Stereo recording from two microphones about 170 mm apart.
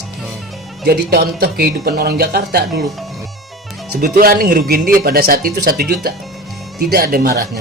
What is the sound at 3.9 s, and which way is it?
Speech, 60° right (ahead or behind).